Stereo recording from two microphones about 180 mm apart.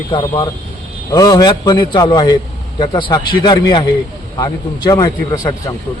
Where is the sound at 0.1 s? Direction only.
30° left (ahead or behind).